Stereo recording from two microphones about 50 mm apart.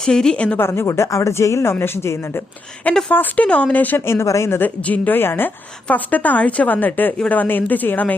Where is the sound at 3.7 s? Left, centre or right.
Left.